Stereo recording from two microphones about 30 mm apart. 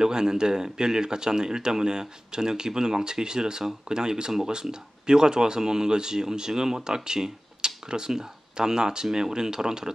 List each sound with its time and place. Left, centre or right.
0.0 s speech: right